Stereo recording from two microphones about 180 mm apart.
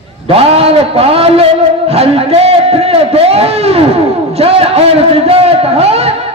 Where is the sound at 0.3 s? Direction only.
35° right (ahead or behind).